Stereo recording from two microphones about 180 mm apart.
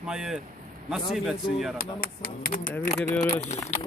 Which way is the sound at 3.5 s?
40° left (ahead or behind).